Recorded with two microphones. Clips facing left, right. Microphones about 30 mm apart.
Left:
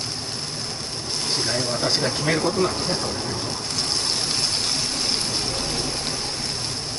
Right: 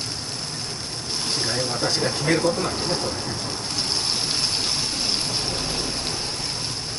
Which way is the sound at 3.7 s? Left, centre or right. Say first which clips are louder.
Even; centre.